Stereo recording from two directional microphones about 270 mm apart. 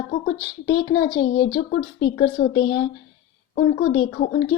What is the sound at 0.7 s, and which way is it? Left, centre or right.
A woman's voice, left.